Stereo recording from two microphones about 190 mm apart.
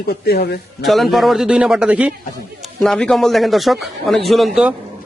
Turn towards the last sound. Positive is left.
turn(degrees=0)  # may be behind; listen again after turning